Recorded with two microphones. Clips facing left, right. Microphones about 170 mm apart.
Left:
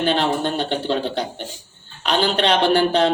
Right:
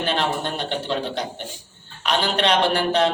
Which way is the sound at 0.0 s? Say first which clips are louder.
Left 4 dB; 30° left (ahead or behind).